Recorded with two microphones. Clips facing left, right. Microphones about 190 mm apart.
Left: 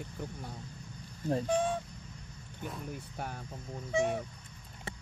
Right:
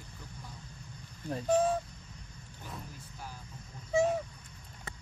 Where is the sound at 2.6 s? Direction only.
60° left (ahead or behind).